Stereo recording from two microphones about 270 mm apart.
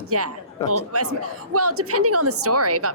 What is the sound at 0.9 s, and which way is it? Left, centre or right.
A woman's voice, right.